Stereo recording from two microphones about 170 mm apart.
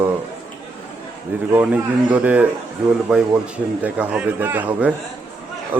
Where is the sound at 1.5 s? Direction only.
10° right (ahead or behind).